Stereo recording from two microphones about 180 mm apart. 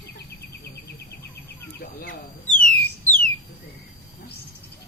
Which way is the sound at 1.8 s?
55° left (ahead or behind).